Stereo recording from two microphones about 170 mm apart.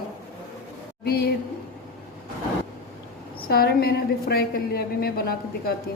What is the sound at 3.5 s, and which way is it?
A woman's voice, 65° left (ahead or behind).